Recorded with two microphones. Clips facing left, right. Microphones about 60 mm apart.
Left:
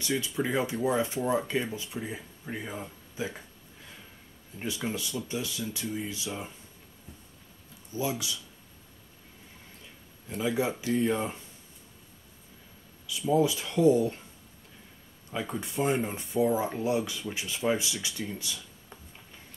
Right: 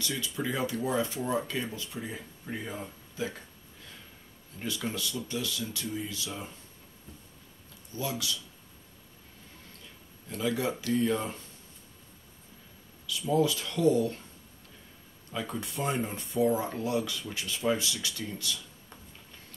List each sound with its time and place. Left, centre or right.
0.0 s speech: left
4.6 s speech: left
7.9 s speech: centre
10.3 s speech: left
13.0 s a sound: left
13.4 s speech: centre
15.3 s speech: centre